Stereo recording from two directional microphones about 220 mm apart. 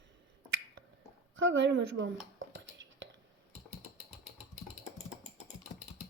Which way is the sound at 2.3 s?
55° right (ahead or behind).